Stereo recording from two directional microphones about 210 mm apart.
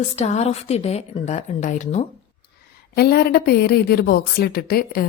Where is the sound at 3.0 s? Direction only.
50° left (ahead or behind).